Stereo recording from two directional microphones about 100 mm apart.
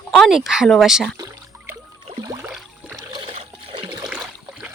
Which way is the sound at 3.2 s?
70° right (ahead or behind).